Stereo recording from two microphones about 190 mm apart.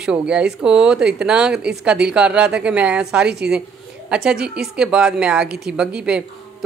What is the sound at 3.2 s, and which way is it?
Speech, 60° right (ahead or behind).